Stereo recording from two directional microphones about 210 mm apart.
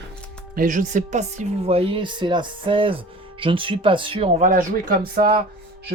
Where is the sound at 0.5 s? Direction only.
40° right (ahead or behind).